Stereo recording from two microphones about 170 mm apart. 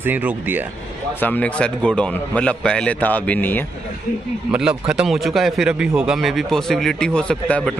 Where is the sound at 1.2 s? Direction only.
10° left (ahead or behind).